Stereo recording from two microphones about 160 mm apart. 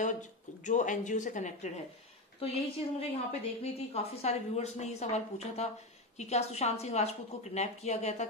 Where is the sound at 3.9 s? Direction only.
40° left (ahead or behind).